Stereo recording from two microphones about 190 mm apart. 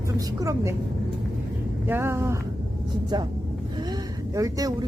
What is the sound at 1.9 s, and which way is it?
Speech, 10° right (ahead or behind).